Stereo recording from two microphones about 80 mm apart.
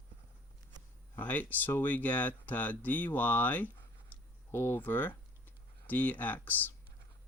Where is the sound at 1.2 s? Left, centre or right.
Left.